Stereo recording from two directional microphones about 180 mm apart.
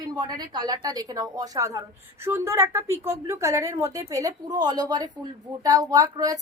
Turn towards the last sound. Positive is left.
turn(degrees=-20)  # may be behind; listen again after turning